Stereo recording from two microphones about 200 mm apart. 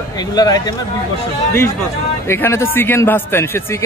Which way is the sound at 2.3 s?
10° left (ahead or behind).